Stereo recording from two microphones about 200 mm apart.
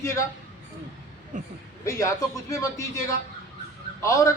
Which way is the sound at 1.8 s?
15° left (ahead or behind).